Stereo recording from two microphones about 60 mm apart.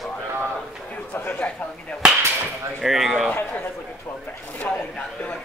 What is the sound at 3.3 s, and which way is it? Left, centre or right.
Speech, left.